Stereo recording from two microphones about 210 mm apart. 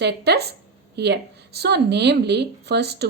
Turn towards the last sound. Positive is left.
turn(degrees=-50)  # may be behind; listen again after turning